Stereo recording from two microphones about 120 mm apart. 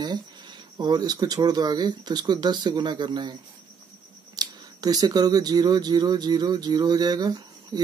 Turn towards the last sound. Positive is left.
turn(degrees=-35)  # may be behind; listen again after turning